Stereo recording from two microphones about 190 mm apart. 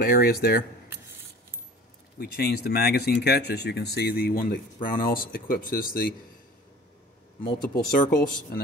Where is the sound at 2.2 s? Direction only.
55° left (ahead or behind).